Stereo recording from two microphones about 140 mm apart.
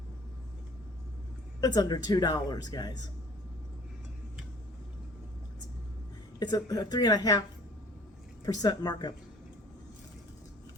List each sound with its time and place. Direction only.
1.6 s a woman's voice: 30° left (ahead or behind)
6.4 s a woman's voice: 30° left (ahead or behind)
8.4 s a woman's voice: 25° left (ahead or behind)